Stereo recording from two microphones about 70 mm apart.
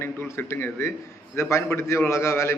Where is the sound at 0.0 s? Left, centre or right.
Left.